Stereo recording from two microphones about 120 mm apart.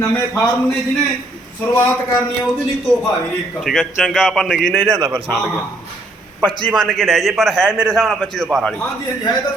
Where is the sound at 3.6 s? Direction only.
5° right (ahead or behind).